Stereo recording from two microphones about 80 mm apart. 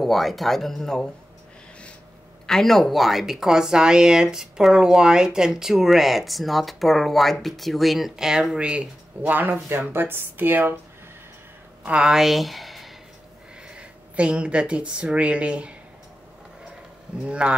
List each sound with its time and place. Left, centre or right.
0.0 s a woman's voice: centre
2.4 s a woman's voice: centre; by 10.8 s right
11.8 s speech: centre
13.7 s speech: centre
17.3 s speech: centre